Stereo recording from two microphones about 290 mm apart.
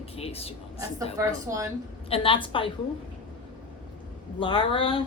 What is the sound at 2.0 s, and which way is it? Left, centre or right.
Speech, centre.